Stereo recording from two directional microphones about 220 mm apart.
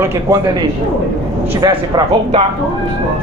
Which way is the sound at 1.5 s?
20° right (ahead or behind).